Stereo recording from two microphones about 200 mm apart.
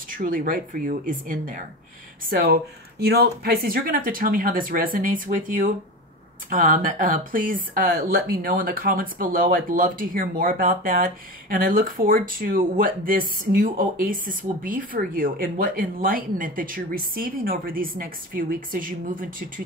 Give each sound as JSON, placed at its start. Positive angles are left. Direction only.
{"t": 0.1, "sound": "speech", "side_deg": -45}